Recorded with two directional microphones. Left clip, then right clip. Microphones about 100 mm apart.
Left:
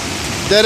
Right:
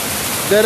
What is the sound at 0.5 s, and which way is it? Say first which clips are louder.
Speech: left 1 dB; 30° left (ahead or behind).